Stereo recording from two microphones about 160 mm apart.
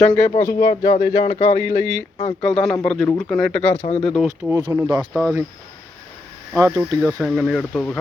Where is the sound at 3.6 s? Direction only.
45° left (ahead or behind).